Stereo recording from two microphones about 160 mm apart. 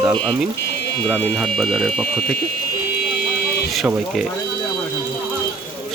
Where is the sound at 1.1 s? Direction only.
5° left (ahead or behind).